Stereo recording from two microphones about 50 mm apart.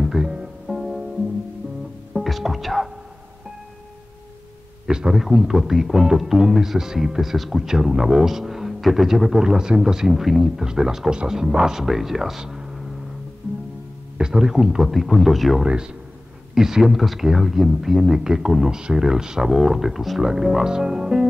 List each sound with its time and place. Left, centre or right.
0.0 s music: centre
2.1 s music: centre
4.8 s a sound: centre
5.2 s speech: centre
14.1 s speech: centre
15.6 s speech: centre